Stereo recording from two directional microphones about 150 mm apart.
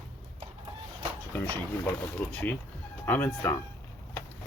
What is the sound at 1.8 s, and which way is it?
Speech, 10° left (ahead or behind).